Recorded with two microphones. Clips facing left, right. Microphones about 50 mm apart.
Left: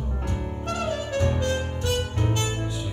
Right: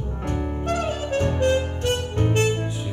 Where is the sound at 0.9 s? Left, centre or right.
Right.